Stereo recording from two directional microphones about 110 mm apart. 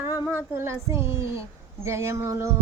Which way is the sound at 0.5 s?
25° right (ahead or behind).